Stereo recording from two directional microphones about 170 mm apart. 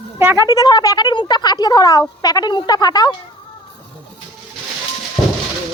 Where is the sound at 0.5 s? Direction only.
25° left (ahead or behind).